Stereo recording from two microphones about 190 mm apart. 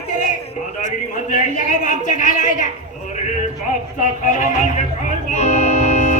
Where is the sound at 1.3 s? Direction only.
40° left (ahead or behind).